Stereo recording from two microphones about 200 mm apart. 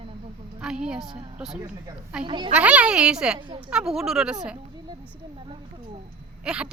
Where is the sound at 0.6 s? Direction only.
5° right (ahead or behind).